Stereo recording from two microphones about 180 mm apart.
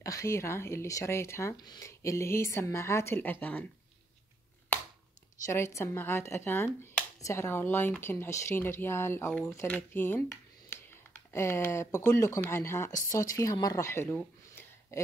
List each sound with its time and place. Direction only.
0.0 s speech: 15° left (ahead or behind)
5.4 s speech: 15° left (ahead or behind)